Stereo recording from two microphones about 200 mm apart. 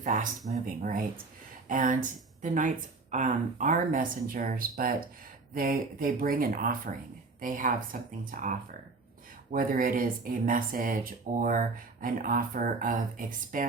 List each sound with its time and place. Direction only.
0.0 s speech: 40° right (ahead or behind)